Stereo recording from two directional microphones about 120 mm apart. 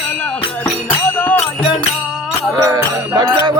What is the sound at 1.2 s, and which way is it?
Music, 15° left (ahead or behind).